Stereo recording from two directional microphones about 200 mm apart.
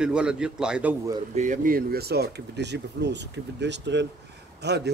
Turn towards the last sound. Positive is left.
turn(degrees=-55)  # may be behind; listen again after turning